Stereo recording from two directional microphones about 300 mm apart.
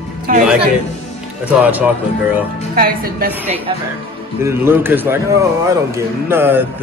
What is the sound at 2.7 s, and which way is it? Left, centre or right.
Speech, right.